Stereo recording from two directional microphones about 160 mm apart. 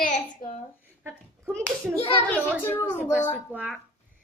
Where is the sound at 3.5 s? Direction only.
5° right (ahead or behind).